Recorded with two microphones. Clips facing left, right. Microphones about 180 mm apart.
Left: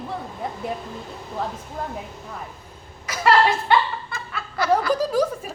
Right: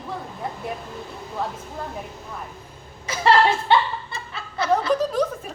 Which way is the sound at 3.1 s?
25° right (ahead or behind).